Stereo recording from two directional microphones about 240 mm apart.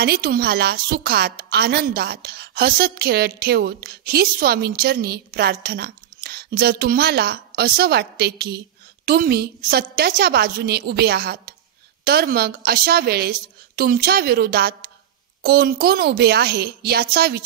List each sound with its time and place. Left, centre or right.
0.0 s a woman's voice: right